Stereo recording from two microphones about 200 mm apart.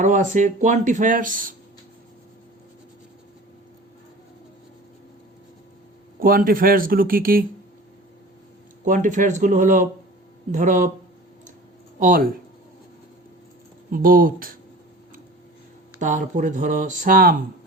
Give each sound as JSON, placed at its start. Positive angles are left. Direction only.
{"t": 0.0, "sound": "speech", "side_deg": -40}
{"t": 6.1, "sound": "speech", "side_deg": -45}
{"t": 8.8, "sound": "speech", "side_deg": -40}
{"t": 11.9, "sound": "speech", "side_deg": -45}
{"t": 13.9, "sound": "speech", "side_deg": -45}
{"t": 16.0, "sound": "speech", "side_deg": -40}